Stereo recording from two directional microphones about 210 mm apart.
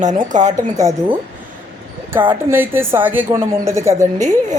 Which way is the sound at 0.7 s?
15° right (ahead or behind).